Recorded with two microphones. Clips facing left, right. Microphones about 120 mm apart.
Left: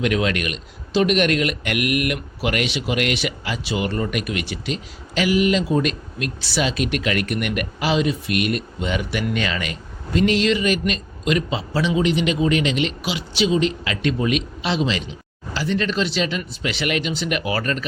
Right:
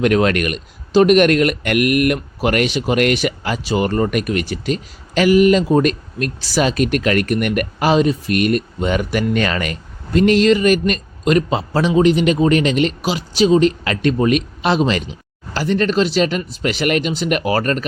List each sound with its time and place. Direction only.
0.0 s speech: 50° right (ahead or behind)